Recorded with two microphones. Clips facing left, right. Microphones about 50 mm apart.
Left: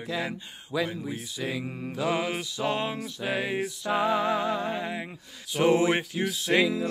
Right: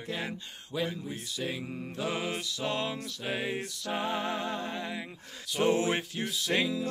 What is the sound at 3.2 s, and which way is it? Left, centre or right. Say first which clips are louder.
Music: left 4 dB; left.